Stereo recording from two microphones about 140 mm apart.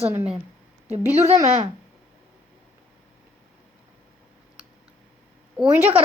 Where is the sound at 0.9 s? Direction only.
15° right (ahead or behind).